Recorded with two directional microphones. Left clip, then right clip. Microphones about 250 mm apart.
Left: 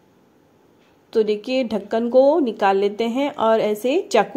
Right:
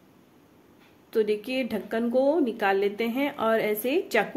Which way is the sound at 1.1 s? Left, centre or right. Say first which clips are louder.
Left 6 dB; centre.